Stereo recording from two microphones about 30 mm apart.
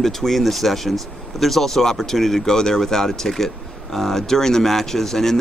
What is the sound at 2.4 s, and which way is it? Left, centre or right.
Speech, centre.